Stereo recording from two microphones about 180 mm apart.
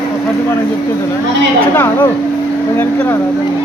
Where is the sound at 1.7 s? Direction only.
15° left (ahead or behind).